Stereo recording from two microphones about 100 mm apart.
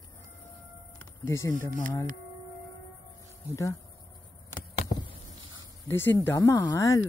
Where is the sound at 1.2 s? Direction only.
25° left (ahead or behind).